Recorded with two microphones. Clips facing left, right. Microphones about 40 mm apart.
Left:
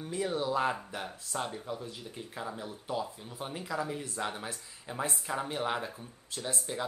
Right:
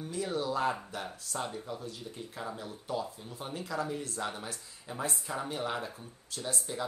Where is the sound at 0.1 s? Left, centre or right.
Left.